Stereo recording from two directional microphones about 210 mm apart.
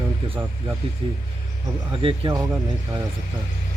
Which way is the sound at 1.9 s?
25° right (ahead or behind).